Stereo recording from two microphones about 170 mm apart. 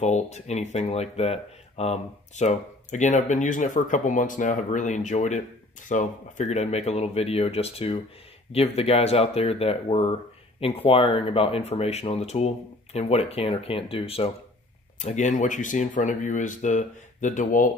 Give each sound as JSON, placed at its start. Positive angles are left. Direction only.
{"t": 0.0, "sound": "speech", "side_deg": 40}
{"t": 15.0, "sound": "speech", "side_deg": 45}